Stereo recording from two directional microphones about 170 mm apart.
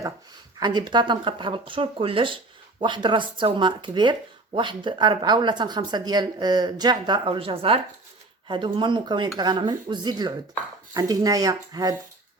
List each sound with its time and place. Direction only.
0.6 s speech: 25° right (ahead or behind)